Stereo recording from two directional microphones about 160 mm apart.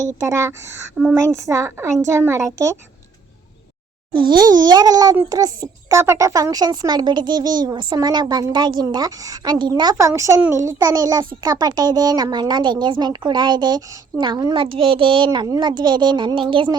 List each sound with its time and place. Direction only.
0.0 s speech: 20° right (ahead or behind)
1.0 s speech: centre (ahead or behind)
1.3 s speech: 20° right (ahead or behind)
4.3 s speech: 25° right (ahead or behind)